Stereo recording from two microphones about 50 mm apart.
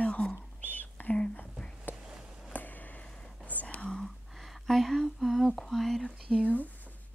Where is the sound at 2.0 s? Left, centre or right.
Centre.